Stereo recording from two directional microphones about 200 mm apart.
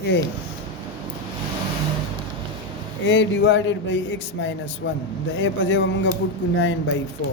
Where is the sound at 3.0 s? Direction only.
65° left (ahead or behind).